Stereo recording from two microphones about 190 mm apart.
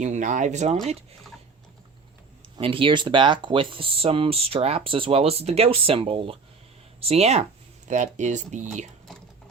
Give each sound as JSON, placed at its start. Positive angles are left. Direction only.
{"t": 0.0, "sound": "speech", "side_deg": -40}
{"t": 2.6, "sound": "speech", "side_deg": -25}